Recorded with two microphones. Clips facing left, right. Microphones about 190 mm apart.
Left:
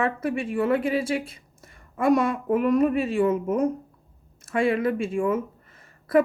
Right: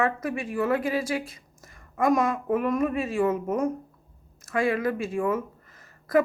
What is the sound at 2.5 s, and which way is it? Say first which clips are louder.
Speech: left 6 dB; 35° left (ahead or behind).